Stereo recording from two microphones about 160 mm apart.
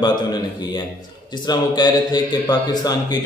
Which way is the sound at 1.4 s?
25° left (ahead or behind).